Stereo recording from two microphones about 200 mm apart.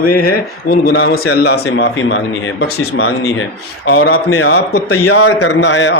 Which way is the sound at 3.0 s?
85° left.